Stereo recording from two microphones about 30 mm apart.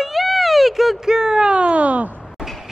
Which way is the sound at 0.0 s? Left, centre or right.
Centre.